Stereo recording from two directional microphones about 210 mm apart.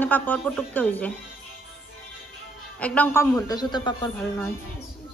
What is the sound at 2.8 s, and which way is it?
A woman's voice, 5° left (ahead or behind).